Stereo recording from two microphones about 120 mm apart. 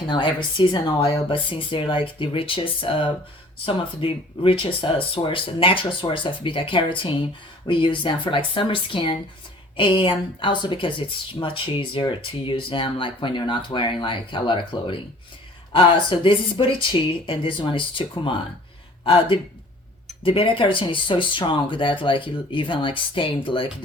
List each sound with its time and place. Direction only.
0.1 s speech: 40° left (ahead or behind)
19.0 s speech: 45° left (ahead or behind)